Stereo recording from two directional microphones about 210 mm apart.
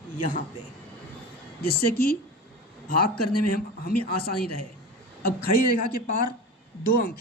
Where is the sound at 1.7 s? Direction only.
45° left (ahead or behind).